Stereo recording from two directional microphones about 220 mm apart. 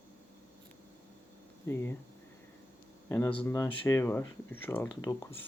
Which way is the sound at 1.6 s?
10° left (ahead or behind).